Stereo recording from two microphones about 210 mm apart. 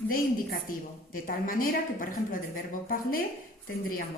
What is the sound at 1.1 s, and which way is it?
A woman's voice, 40° left (ahead or behind).